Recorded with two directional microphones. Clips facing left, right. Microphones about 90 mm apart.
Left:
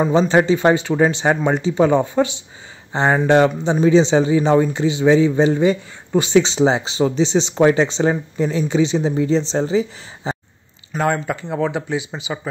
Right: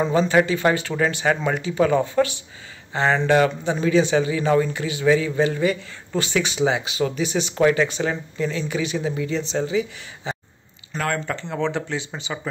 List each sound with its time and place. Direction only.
0.0 s a man's voice: 20° left (ahead or behind)
11.0 s speech: 15° left (ahead or behind)